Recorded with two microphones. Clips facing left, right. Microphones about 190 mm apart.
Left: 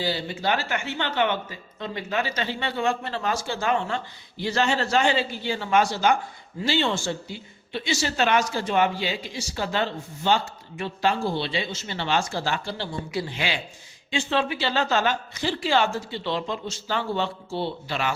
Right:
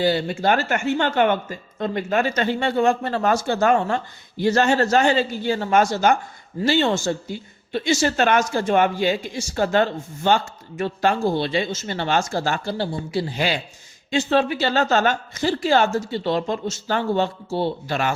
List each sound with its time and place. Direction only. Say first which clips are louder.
0.0 s speech: right 7 dB; 55° right (ahead or behind)